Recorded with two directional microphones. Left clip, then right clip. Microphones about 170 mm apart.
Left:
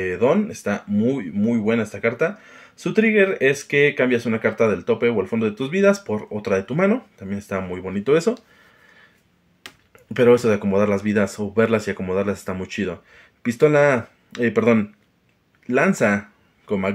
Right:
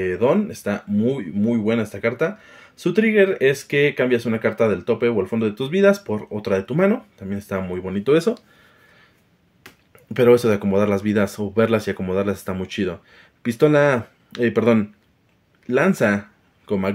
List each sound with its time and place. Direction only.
0.0 s speech: 25° right (ahead or behind)
9.6 s tick-tock: 15° left (ahead or behind)
10.1 s speech: 25° right (ahead or behind)